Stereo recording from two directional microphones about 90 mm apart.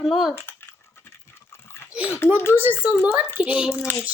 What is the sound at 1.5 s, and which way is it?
Dog, 30° left (ahead or behind).